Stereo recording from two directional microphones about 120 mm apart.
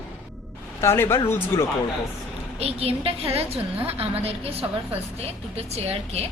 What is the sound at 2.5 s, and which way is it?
A woman's voice, 55° right (ahead or behind).